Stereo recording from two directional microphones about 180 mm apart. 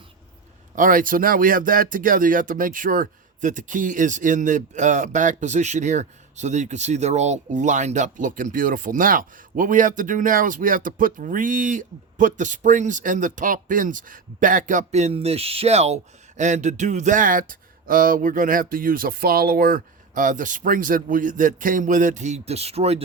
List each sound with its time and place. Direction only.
0.8 s speech: 50° right (ahead or behind)